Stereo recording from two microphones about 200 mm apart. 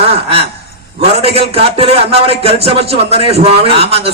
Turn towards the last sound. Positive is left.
turn(degrees=-30)  # may be behind; listen again after turning